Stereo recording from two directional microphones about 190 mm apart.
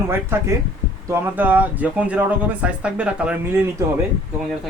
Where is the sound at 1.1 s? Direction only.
10° right (ahead or behind).